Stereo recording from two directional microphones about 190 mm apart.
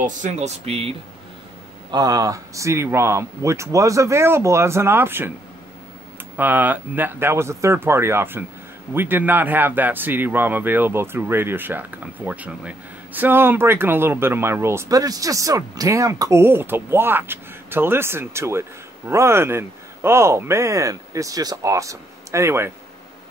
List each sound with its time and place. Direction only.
0.0 s speech: 40° right (ahead or behind)
1.9 s speech: 20° right (ahead or behind)
6.3 s speech: 10° right (ahead or behind)